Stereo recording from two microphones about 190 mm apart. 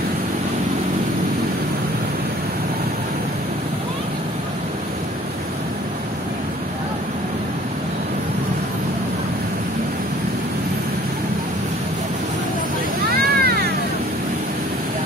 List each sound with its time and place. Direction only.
13.1 s vehicle: 55° right (ahead or behind)